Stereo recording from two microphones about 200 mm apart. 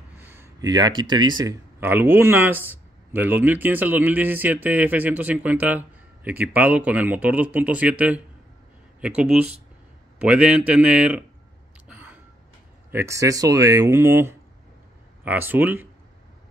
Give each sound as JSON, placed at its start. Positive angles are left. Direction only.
{"t": 0.2, "sound": "speech", "side_deg": -10}
{"t": 11.9, "sound": "a sound", "side_deg": -5}
{"t": 12.9, "sound": "speech", "side_deg": -15}